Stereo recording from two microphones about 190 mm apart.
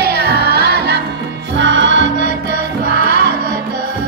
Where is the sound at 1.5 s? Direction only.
70° right (ahead or behind).